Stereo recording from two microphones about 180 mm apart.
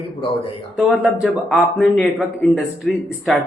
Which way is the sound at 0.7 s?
5° right (ahead or behind).